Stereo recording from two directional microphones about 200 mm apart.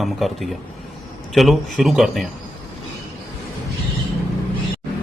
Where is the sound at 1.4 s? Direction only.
Centre (ahead or behind).